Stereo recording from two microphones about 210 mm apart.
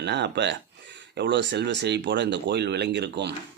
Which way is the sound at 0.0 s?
55° right (ahead or behind).